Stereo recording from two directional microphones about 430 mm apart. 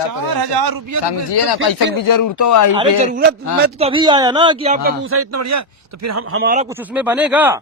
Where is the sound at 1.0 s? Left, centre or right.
Left.